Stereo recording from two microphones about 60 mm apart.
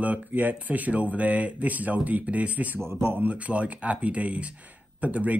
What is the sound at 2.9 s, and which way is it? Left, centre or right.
Speech, right.